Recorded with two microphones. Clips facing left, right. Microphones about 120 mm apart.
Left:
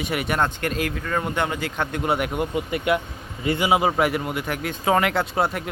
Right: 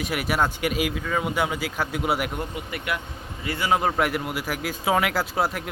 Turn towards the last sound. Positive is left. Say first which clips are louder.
# left 2 dB
turn(degrees=0)  # may be behind; listen again after turning